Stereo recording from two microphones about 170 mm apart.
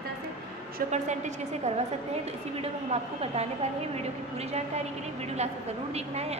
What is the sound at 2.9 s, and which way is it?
A woman's voice, 40° right (ahead or behind).